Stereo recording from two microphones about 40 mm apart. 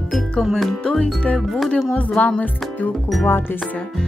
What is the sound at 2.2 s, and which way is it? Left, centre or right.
Music, left.